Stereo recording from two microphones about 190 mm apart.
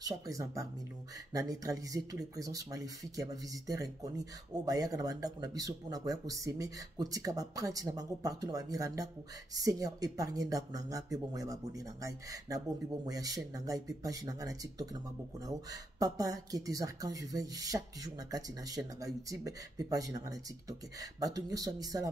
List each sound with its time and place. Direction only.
0.0 s speech: 15° right (ahead or behind)